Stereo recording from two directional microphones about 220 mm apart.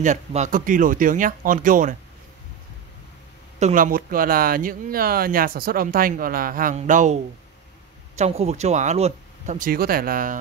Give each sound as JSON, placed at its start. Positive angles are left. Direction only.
{"t": 0.0, "sound": "speech", "side_deg": -35}
{"t": 3.5, "sound": "speech", "side_deg": -35}
{"t": 8.2, "sound": "speech", "side_deg": -30}